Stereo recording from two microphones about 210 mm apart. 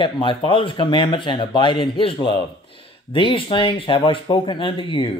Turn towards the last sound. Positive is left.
turn(degrees=25)  # may be behind; listen again after turning